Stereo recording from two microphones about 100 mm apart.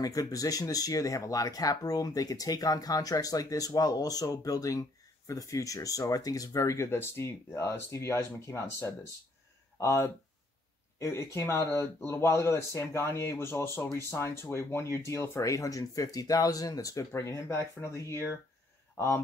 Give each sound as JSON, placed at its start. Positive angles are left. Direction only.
{"t": 0.0, "sound": "speech", "side_deg": 35}